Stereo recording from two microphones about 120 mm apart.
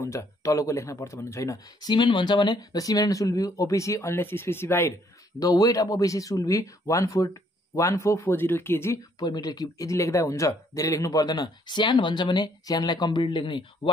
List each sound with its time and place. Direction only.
0.0 s speech: 25° left (ahead or behind)
9.2 s speech: 35° left (ahead or behind)